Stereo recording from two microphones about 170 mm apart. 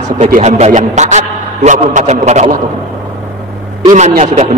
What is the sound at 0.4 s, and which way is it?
A man's voice, 40° right (ahead or behind).